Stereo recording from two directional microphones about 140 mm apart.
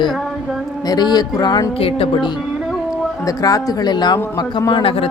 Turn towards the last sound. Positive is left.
turn(degrees=40)  # may be behind; listen again after turning